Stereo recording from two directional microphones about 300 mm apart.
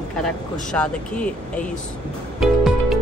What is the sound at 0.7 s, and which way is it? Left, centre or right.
Speech, centre.